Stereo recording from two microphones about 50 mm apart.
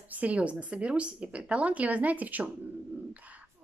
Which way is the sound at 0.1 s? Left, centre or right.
Right.